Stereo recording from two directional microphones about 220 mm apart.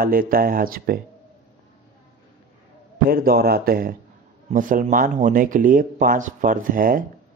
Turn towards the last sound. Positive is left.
turn(degrees=-40)  # may be behind; listen again after turning